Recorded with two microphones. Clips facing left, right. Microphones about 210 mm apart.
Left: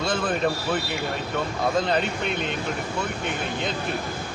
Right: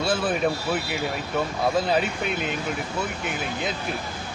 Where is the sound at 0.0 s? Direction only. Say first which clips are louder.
Right 1 dB; 5° right (ahead or behind).